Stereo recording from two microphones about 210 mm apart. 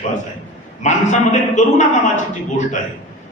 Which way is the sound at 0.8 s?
35° left (ahead or behind).